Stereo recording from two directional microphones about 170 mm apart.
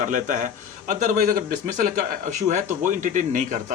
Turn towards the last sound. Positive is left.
turn(degrees=-45)  # may be behind; listen again after turning